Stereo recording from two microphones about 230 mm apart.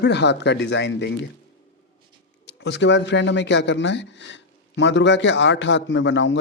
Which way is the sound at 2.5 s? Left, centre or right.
Left.